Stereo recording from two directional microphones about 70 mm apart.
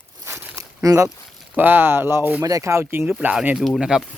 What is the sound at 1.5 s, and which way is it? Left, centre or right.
Speech, right.